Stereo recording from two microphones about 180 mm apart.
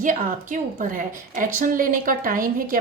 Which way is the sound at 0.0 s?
45° right (ahead or behind).